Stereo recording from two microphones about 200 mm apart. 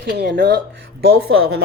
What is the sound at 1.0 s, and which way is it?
Speech, 85° right.